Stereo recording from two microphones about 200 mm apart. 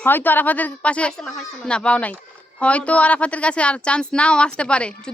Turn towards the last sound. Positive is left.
turn(degrees=5)  # may be behind; listen again after turning